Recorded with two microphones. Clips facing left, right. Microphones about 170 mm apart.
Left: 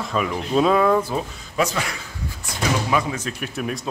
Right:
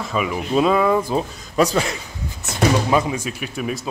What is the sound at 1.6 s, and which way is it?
Speech, 35° right (ahead or behind).